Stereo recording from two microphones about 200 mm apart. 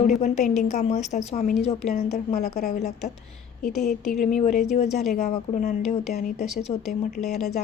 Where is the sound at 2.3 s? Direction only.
50° left (ahead or behind).